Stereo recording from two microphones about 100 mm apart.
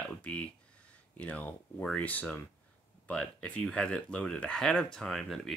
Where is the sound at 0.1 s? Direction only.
10° left (ahead or behind).